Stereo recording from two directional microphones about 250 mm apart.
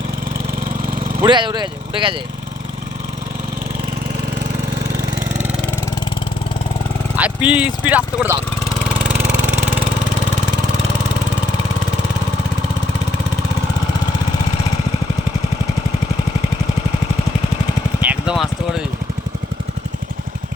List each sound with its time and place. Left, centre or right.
1.2 s speech: centre
7.2 s speech: centre
18.0 s a sound: centre